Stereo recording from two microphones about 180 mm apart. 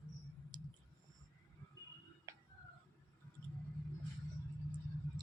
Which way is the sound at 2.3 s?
15° right (ahead or behind).